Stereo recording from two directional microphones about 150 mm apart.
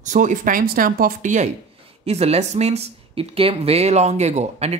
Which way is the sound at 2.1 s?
45° right (ahead or behind).